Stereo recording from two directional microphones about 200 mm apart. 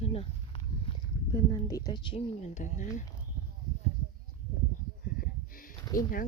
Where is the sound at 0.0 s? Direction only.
30° left (ahead or behind).